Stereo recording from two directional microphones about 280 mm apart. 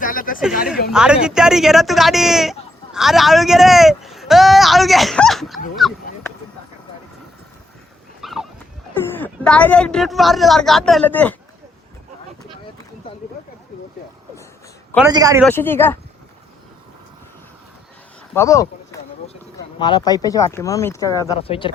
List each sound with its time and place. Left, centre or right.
0.0 s speech: left
0.9 s speech: centre
8.2 s dog: centre
9.2 s speech: centre
15.0 s a man's voice: centre
15.4 s speech: centre
18.3 s speech: centre